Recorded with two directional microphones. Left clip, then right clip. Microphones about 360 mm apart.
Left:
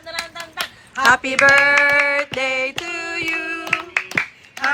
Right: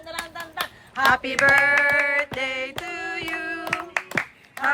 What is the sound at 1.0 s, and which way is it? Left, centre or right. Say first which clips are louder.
Speech: left 5 dB; centre.